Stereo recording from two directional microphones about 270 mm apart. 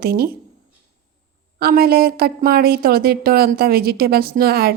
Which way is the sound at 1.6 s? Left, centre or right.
Right.